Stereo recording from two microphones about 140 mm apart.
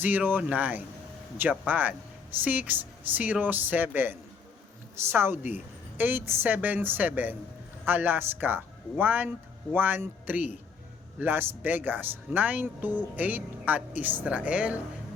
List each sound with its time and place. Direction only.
0.0 s speech: 10° right (ahead or behind)